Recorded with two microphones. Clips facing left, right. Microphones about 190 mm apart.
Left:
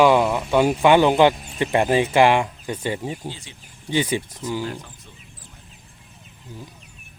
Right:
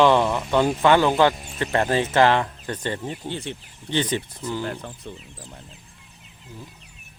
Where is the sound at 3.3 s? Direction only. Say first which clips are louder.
Right 10 dB; 60° right (ahead or behind).